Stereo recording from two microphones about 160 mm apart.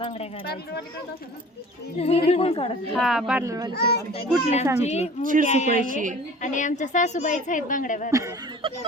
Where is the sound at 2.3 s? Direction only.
40° left (ahead or behind).